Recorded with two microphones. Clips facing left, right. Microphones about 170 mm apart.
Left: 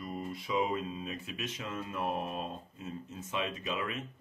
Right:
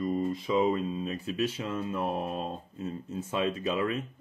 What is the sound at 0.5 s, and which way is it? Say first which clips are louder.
Speech: right 5 dB; 35° right (ahead or behind).